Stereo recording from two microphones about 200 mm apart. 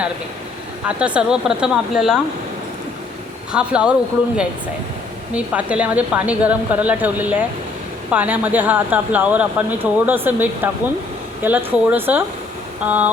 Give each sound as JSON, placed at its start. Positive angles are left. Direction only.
{"t": 0.9, "sound": "speech", "side_deg": -5}
{"t": 3.5, "sound": "speech", "side_deg": -5}
{"t": 5.3, "sound": "a woman's voice", "side_deg": -5}